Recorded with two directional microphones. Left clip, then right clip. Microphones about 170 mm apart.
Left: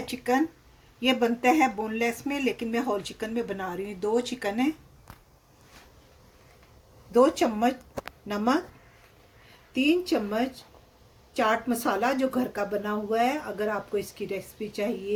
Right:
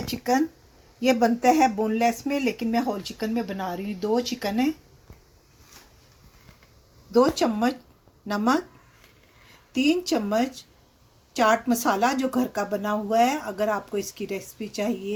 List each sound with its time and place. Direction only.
0.1 s speech: 40° right (ahead or behind)
7.1 s speech: 35° right (ahead or behind)
9.7 s speech: 40° right (ahead or behind)